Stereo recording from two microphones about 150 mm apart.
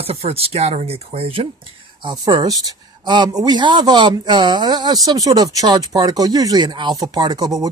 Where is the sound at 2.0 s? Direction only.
30° right (ahead or behind).